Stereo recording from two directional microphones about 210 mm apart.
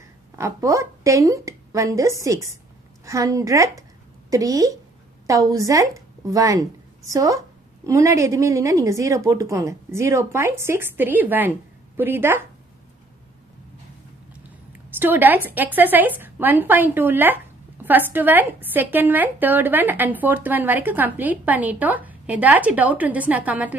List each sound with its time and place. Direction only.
0.4 s a woman's voice: 15° right (ahead or behind)
15.0 s a woman's voice: 10° right (ahead or behind)